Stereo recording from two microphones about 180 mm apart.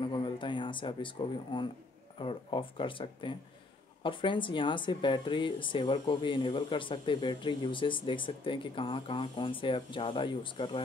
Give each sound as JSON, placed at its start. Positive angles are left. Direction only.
{"t": 0.0, "sound": "speech", "side_deg": 25}